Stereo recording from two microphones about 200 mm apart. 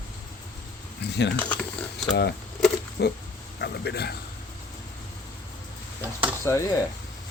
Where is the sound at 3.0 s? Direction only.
55° left (ahead or behind).